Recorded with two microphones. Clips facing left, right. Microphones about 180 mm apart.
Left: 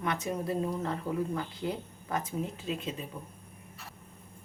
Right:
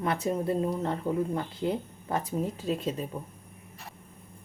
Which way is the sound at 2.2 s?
40° right (ahead or behind).